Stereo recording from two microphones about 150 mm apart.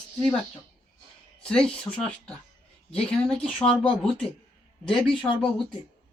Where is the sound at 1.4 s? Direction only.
5° left (ahead or behind).